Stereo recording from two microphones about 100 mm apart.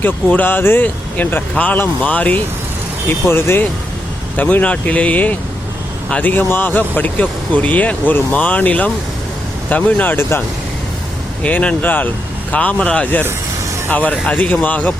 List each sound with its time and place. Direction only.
0.0 s speech: 20° left (ahead or behind)
11.4 s speech: 15° left (ahead or behind)